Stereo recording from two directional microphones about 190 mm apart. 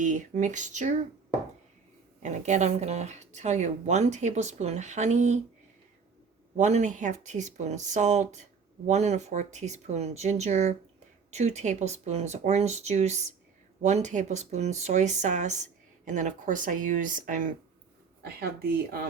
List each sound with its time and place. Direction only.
0.0 s speech: 40° right (ahead or behind)
2.2 s speech: 40° right (ahead or behind)
6.6 s speech: 35° right (ahead or behind)
18.2 s speech: 55° right (ahead or behind)